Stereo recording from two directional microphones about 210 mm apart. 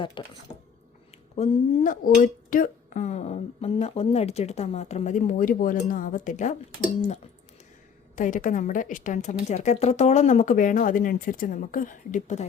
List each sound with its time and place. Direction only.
0.2 s speech: 25° left (ahead or behind)
1.4 s speech: 35° left (ahead or behind)
8.1 s speech: 40° left (ahead or behind)